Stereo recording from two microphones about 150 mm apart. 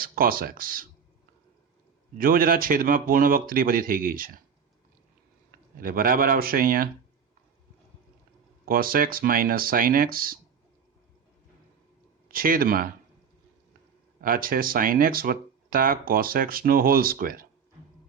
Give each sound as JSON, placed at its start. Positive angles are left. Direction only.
{"t": 0.0, "sound": "speech", "side_deg": -75}
{"t": 2.1, "sound": "speech", "side_deg": -70}
{"t": 5.5, "sound": "speech", "side_deg": -75}
{"t": 8.6, "sound": "speech", "side_deg": -75}
{"t": 12.3, "sound": "speech", "side_deg": -70}
{"t": 14.2, "sound": "speech", "side_deg": -70}